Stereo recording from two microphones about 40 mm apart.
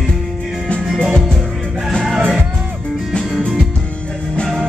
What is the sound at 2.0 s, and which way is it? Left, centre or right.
Music, centre.